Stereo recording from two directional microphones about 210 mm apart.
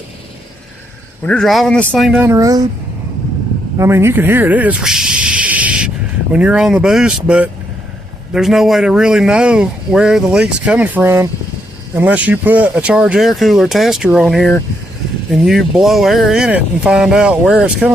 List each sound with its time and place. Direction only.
1.2 s speech: 5° left (ahead or behind)
2.2 s speech: 15° right (ahead or behind)
3.8 s speech: 10° right (ahead or behind)